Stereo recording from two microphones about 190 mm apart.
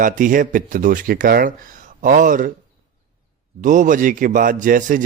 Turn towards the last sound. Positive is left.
turn(degrees=-45)  # may be behind; listen again after turning